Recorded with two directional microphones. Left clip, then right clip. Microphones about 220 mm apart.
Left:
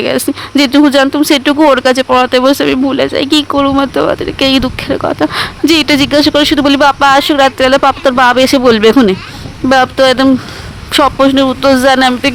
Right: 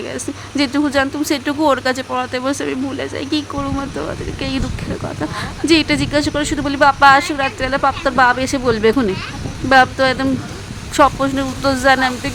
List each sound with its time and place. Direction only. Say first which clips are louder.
0.0 s speech: left 12 dB; 45° left (ahead or behind)